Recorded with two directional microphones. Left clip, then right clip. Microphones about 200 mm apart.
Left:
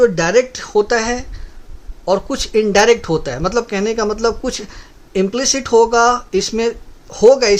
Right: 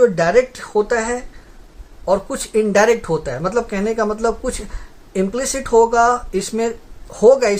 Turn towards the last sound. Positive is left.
turn(degrees=45)  # may be behind; listen again after turning